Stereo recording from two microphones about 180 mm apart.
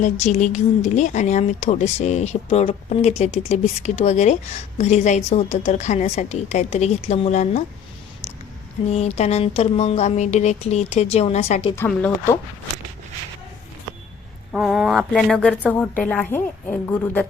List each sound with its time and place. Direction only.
0.0 s speech: 40° left (ahead or behind)
8.9 s speech: 35° left (ahead or behind)
11.8 s a woman's voice: 15° left (ahead or behind)
14.5 s a woman's voice: 5° right (ahead or behind)